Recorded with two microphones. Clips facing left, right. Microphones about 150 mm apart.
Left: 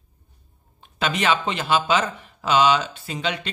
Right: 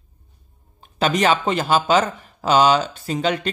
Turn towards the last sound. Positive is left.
turn(degrees=-45)  # may be behind; listen again after turning